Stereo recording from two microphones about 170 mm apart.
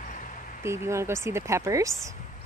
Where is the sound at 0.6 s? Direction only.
15° right (ahead or behind).